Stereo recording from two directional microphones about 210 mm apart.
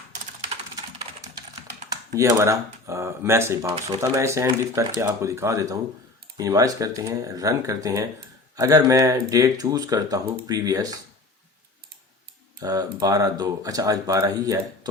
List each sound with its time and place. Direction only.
1.9 s speech: 15° right (ahead or behind)
12.6 s speech: 15° right (ahead or behind)